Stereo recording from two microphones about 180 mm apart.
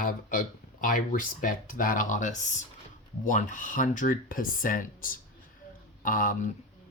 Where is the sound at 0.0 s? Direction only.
50° left (ahead or behind).